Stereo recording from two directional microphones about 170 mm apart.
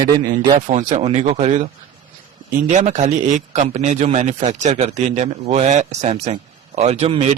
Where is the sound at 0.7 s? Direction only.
40° right (ahead or behind).